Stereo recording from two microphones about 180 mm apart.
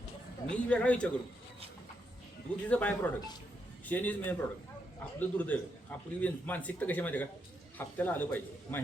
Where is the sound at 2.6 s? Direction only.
10° left (ahead or behind).